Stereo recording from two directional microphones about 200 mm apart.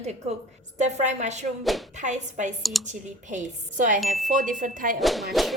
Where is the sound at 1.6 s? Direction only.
Centre (ahead or behind).